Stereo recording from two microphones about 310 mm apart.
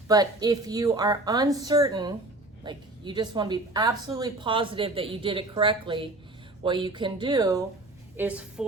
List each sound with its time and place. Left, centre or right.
0.1 s a woman's voice: centre